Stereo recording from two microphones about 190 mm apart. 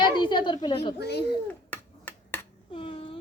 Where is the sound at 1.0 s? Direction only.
60° left (ahead or behind).